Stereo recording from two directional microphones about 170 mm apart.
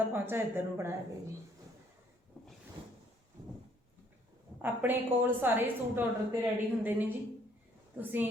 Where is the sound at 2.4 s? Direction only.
5° left (ahead or behind).